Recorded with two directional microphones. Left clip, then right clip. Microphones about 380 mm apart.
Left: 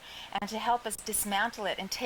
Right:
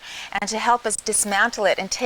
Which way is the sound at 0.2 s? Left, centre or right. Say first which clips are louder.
Right 10 dB; right.